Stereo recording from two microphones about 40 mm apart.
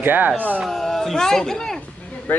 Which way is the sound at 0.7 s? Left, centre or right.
Centre.